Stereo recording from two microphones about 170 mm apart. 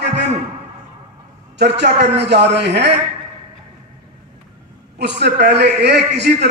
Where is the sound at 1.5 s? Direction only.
85° right.